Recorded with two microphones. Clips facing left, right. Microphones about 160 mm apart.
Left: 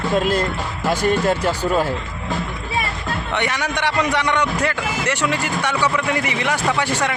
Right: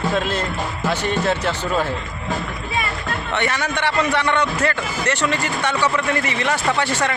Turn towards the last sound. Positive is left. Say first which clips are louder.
# even
turn(degrees=10)  # may be behind; listen again after turning